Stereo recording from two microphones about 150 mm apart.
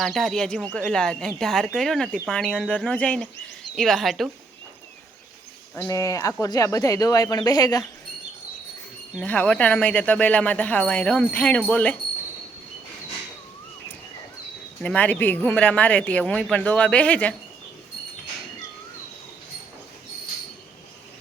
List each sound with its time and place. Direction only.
0.0 s speech: centre (ahead or behind)
5.7 s speech: 15° left (ahead or behind)
9.2 s speech: 10° left (ahead or behind)
14.8 s speech: 10° left (ahead or behind)